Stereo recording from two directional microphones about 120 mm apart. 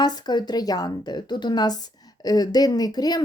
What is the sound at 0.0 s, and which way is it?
Speech, 35° left (ahead or behind).